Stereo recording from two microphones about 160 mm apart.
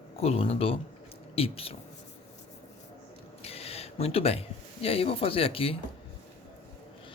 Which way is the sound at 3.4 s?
40° left (ahead or behind).